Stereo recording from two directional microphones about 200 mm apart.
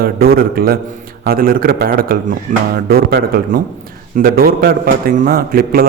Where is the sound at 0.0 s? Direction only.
50° right (ahead or behind).